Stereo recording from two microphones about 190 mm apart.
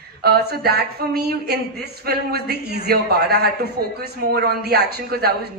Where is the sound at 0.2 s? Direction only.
55° right (ahead or behind).